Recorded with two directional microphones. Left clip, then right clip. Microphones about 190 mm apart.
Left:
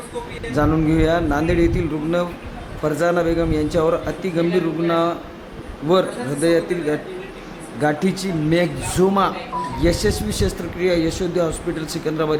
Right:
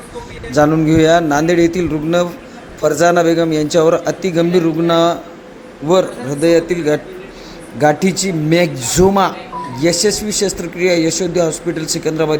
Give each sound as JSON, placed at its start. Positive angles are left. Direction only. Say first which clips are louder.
{"t": 0.5, "sound": "speech", "louder": "right 7 dB", "side_deg": -20}
{"t": 4.4, "sound": "a man's voice", "louder": "right 5 dB", "side_deg": 0}
{"t": 4.9, "sound": "speech", "louder": "right 7 dB", "side_deg": -25}
{"t": 5.9, "sound": "speech", "louder": "right 4 dB", "side_deg": -5}
{"t": 6.5, "sound": "speech", "louder": "right 7 dB", "side_deg": -25}
{"t": 9.3, "sound": "speech", "louder": "even", "side_deg": 0}
{"t": 9.8, "sound": "speech", "louder": "right 7 dB", "side_deg": -15}